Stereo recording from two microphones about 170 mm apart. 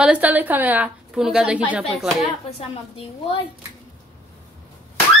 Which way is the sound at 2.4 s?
35° left (ahead or behind).